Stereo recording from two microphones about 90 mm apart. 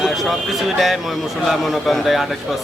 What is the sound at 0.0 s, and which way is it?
Speech, centre (ahead or behind).